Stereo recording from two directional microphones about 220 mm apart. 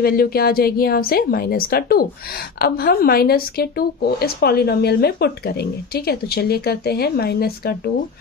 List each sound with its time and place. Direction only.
0.0 s speech: 45° left (ahead or behind)